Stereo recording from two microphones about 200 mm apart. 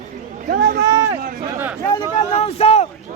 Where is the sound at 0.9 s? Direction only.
15° right (ahead or behind).